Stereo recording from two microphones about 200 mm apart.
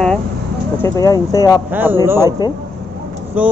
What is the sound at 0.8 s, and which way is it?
Speech, 15° left (ahead or behind).